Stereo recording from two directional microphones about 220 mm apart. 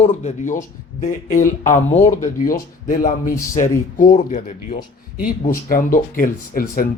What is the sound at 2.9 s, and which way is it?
Speech, 35° left (ahead or behind).